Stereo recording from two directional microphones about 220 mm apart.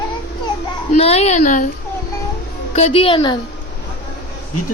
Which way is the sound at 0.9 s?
30° left (ahead or behind).